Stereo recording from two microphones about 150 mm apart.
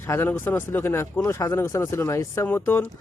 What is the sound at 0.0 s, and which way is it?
Speech, 15° left (ahead or behind).